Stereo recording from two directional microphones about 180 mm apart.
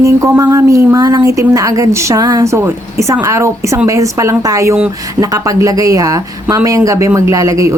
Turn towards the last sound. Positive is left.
turn(degrees=-20)  # may be behind; listen again after turning